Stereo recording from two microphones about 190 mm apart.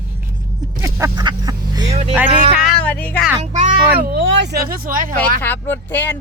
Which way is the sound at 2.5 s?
5° right (ahead or behind).